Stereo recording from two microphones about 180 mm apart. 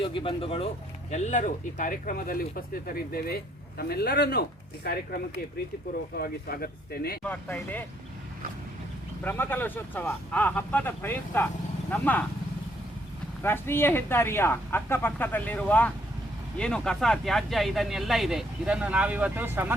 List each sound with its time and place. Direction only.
0.0 s speech: 30° left (ahead or behind); by 7.2 s 55° left (ahead or behind)
7.3 s speech: 10° left (ahead or behind)
9.2 s speech: 10° left (ahead or behind)
13.4 s speech: 10° left (ahead or behind); by 19.7 s 10° right (ahead or behind)